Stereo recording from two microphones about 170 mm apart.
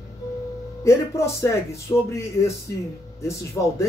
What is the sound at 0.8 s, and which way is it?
Speech, 15° left (ahead or behind).